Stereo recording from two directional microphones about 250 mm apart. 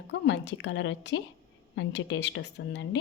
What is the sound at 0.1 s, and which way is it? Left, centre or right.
Speech, left.